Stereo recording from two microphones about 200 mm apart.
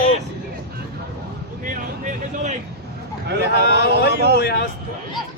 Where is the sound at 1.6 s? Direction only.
40° right (ahead or behind).